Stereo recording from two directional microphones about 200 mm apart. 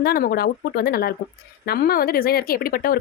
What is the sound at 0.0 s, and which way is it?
Speech, 50° left (ahead or behind).